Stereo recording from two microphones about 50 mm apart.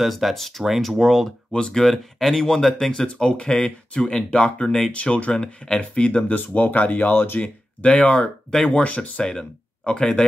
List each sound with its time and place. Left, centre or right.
0.0 s speech: centre
1.5 s speech: centre
4.9 s speech: left
6.2 s speech: left
7.8 s speech: left
9.2 s speech: centre